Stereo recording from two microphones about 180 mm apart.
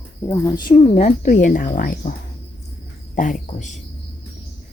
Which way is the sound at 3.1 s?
45° left (ahead or behind).